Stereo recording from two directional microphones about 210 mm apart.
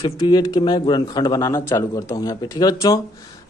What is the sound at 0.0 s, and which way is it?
A man's voice, 20° left (ahead or behind).